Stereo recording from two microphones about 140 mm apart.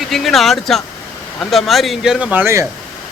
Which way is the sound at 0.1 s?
Centre (ahead or behind).